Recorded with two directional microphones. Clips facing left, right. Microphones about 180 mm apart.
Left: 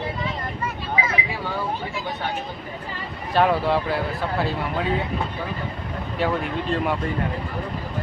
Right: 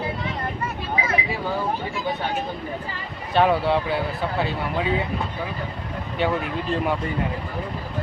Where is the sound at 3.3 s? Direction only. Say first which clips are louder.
Right 1 dB; centre (ahead or behind).